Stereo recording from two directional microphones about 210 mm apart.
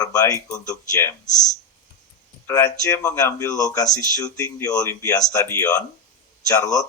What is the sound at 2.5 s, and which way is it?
Speech, 15° left (ahead or behind).